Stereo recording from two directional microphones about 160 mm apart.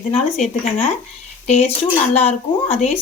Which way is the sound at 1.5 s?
40° left (ahead or behind).